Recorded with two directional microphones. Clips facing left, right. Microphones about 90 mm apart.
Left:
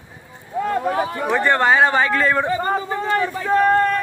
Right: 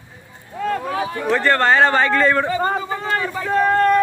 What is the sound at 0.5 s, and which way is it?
Speech, 20° left (ahead or behind).